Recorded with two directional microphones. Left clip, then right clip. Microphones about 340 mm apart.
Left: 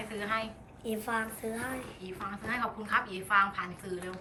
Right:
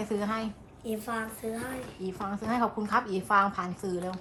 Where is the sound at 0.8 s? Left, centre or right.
Centre.